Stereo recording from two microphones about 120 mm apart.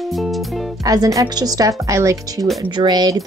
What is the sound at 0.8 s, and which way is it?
Speech, 30° right (ahead or behind).